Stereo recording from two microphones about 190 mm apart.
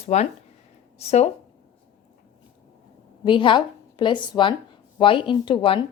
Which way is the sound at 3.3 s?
25° left (ahead or behind).